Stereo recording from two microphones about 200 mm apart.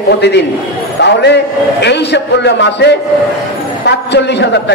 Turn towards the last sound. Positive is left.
turn(degrees=60)  # may be behind; listen again after turning